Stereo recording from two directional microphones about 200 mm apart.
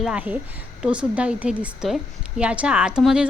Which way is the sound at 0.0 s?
5° right (ahead or behind).